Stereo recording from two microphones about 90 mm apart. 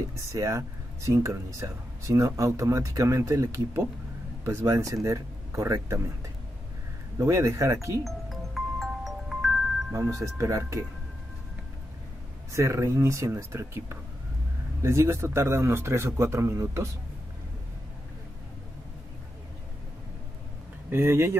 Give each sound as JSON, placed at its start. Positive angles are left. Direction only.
{"t": 0.1, "sound": "speech", "side_deg": -35}
{"t": 7.2, "sound": "speech", "side_deg": -35}
{"t": 8.0, "sound": "chime", "side_deg": 0}
{"t": 9.9, "sound": "speech", "side_deg": -35}
{"t": 12.5, "sound": "speech", "side_deg": -35}
{"t": 20.9, "sound": "speech", "side_deg": -25}